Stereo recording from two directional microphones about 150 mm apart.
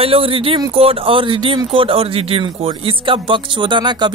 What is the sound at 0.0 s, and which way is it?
Speech, 40° right (ahead or behind).